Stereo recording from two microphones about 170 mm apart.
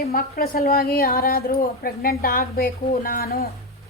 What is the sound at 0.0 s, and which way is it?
A woman's voice, 60° left (ahead or behind).